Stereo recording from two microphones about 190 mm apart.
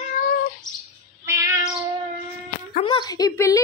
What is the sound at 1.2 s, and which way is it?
Cat, 15° right (ahead or behind).